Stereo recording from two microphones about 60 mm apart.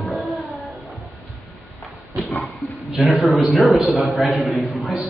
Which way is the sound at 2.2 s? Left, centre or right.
Left.